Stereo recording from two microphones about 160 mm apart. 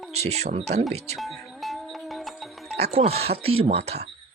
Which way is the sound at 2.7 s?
40° right (ahead or behind).